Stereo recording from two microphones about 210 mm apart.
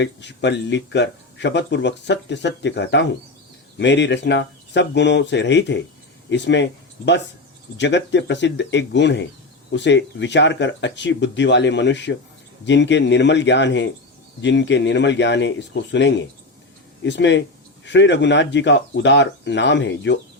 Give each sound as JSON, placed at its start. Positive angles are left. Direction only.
{"t": 0.0, "sound": "speech", "side_deg": 55}